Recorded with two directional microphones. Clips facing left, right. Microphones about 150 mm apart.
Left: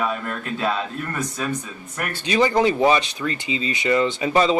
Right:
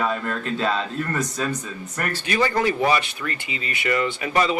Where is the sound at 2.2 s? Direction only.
20° left (ahead or behind).